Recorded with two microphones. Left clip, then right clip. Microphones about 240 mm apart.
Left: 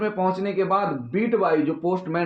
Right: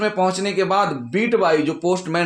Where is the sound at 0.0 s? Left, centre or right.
Right.